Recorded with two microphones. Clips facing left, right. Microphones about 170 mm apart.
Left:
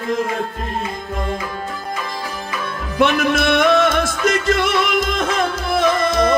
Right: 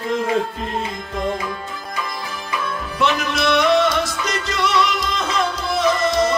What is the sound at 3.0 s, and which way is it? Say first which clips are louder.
Music: left 4 dB; 50° left (ahead or behind).